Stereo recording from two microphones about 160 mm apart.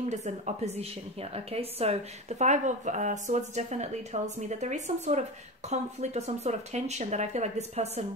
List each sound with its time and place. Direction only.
0.1 s speech: 45° right (ahead or behind)